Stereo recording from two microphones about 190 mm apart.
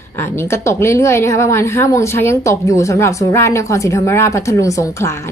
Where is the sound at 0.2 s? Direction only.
15° left (ahead or behind).